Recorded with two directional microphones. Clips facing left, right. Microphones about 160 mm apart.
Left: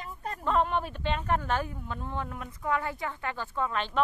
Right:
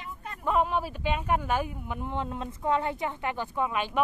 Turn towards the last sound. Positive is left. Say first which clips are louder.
# right 2 dB
turn(degrees=-10)  # may be behind; listen again after turning